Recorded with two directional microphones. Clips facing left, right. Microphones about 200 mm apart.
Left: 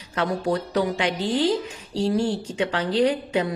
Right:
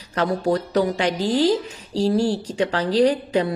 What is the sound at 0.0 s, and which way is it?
Speech, 40° right (ahead or behind).